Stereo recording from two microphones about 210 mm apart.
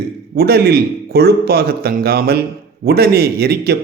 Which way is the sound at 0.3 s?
50° right (ahead or behind).